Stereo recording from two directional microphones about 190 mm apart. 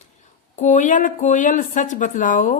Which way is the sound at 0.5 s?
40° left (ahead or behind).